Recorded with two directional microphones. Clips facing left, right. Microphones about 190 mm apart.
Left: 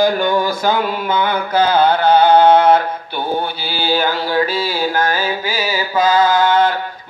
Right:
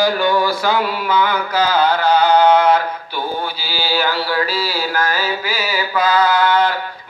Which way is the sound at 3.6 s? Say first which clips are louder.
Left 2 dB; 55° left (ahead or behind).